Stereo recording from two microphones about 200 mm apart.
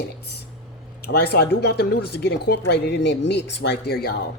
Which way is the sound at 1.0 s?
50° left (ahead or behind).